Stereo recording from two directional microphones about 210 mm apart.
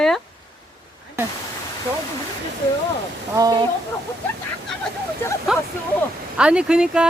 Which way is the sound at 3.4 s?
15° right (ahead or behind).